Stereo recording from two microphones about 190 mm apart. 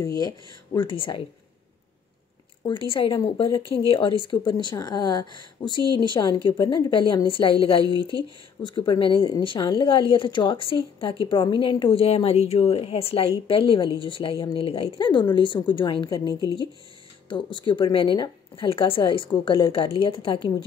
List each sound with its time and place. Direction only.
0.0 s speech: 20° left (ahead or behind)
2.6 s speech: 25° left (ahead or behind)
8.6 s speech: 25° left (ahead or behind)